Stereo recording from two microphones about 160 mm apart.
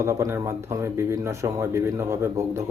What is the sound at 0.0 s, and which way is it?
Speech, 15° right (ahead or behind).